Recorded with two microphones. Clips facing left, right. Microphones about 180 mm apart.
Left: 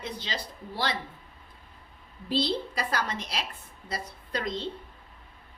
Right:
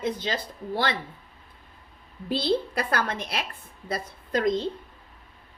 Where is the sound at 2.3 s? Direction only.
55° right (ahead or behind).